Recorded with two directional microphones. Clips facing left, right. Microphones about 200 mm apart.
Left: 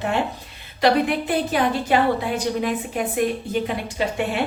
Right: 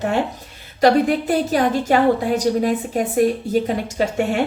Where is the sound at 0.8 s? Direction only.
40° right (ahead or behind).